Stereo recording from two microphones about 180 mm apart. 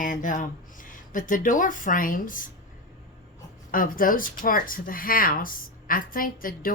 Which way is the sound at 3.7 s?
50° left (ahead or behind).